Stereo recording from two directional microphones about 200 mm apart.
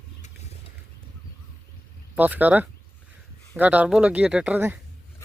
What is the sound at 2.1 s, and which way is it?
Speech, 10° right (ahead or behind).